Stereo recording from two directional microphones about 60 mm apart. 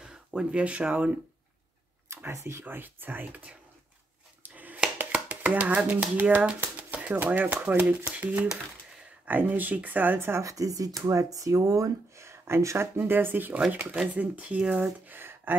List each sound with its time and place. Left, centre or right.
0.0 s speech: centre
2.0 s speech: right
2.6 s speech: right
4.4 s a sound: right
5.3 s speech: right
10.1 s speech: right
10.4 s speech: right